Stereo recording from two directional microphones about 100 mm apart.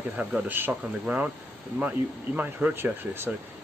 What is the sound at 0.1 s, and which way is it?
Speech, 10° right (ahead or behind).